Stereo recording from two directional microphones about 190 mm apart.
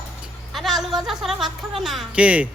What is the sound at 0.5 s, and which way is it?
A woman's voice, centre (ahead or behind).